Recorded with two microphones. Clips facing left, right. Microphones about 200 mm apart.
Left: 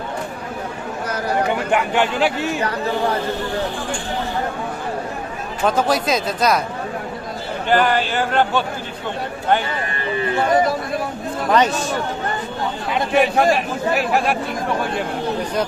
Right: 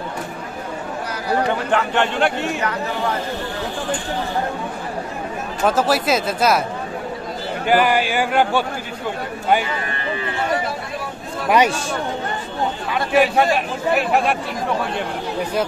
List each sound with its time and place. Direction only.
1.5 s a man's voice: 10° left (ahead or behind)
5.7 s a man's voice: 5° right (ahead or behind)
7.6 s a man's voice: 10° right (ahead or behind)
11.4 s a man's voice: 10° right (ahead or behind)
13.1 s a man's voice: centre (ahead or behind)